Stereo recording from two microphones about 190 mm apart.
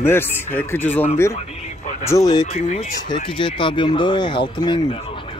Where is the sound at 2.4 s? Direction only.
35° left (ahead or behind).